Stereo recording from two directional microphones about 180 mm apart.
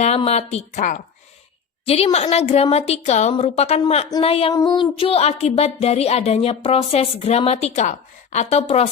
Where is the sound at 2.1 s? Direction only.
35° left (ahead or behind).